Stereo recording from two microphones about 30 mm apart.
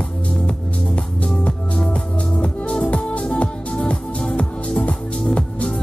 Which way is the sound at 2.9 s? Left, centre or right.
Left.